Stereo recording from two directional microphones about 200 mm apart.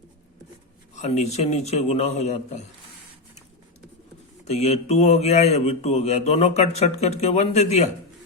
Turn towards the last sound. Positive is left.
turn(degrees=35)  # may be behind; listen again after turning